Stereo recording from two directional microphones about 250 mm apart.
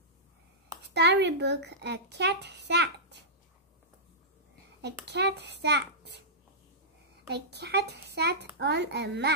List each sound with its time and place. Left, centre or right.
0.8 s speech: right
4.8 s speech: right
7.2 s a child's voice: right